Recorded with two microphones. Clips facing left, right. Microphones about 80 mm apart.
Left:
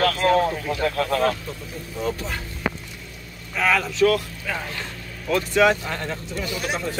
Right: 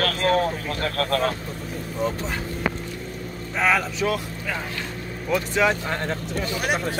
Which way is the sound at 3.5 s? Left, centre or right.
Right.